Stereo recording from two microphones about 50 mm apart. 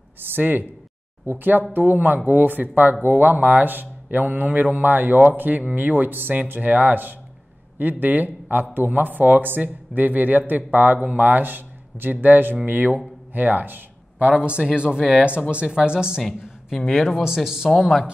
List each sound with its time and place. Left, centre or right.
0.4 s speech: right
2.0 s speech: right
2.2 s a man's voice: right
14.1 s speech: right
16.2 s speech: centre
17.2 s speech: centre